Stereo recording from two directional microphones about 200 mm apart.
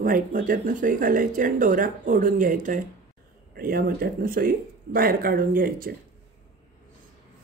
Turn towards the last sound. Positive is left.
turn(degrees=-45)  # may be behind; listen again after turning